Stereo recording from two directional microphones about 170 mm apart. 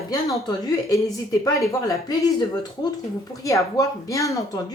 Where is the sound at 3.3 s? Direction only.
20° left (ahead or behind).